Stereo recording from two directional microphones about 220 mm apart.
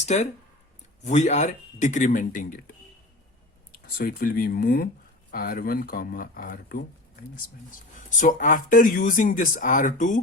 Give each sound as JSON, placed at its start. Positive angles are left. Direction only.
{"t": 0.0, "sound": "speech", "side_deg": 30}
{"t": 8.2, "sound": "speech", "side_deg": 35}